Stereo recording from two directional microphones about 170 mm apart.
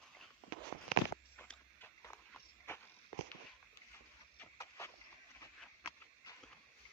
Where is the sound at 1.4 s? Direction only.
10° left (ahead or behind).